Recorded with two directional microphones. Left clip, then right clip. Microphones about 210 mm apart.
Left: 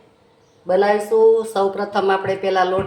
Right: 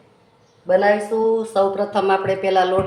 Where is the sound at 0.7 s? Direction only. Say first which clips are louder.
Right 1 dB; 40° left (ahead or behind).